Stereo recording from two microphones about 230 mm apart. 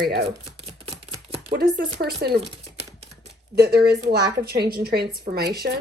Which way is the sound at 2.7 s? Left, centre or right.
Right.